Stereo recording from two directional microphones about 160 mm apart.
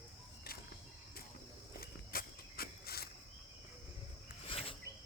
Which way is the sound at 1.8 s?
70° left (ahead or behind).